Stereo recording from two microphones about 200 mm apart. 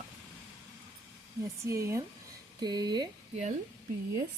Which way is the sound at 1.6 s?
15° right (ahead or behind).